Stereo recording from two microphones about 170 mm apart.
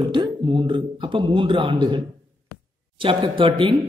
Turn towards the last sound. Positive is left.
turn(degrees=-30)  # may be behind; listen again after turning